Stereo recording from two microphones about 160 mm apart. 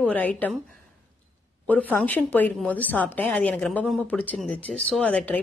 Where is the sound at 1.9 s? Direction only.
10° left (ahead or behind).